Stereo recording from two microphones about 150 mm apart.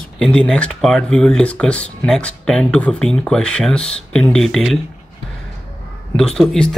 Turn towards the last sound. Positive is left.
turn(degrees=5)  # may be behind; listen again after turning